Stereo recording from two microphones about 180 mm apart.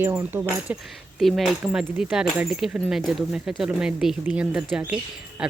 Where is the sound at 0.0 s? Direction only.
15° right (ahead or behind).